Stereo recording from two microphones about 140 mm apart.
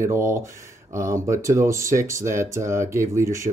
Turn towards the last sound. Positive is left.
turn(degrees=-20)  # may be behind; listen again after turning